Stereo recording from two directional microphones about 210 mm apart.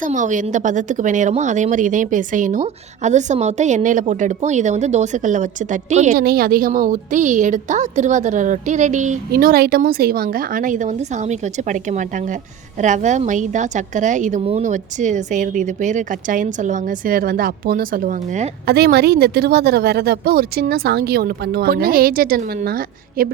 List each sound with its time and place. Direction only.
0.0 s speech: 35° right (ahead or behind)
18.6 s a woman's voice: 50° right (ahead or behind)